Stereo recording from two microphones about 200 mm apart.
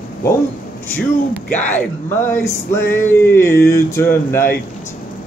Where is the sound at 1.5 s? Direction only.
5° left (ahead or behind).